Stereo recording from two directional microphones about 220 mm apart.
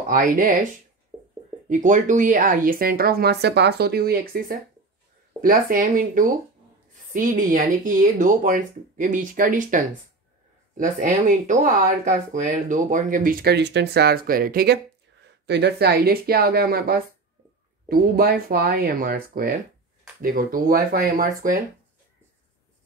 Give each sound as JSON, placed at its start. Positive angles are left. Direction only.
{"t": 0.1, "sound": "speech", "side_deg": -40}
{"t": 1.7, "sound": "speech", "side_deg": -35}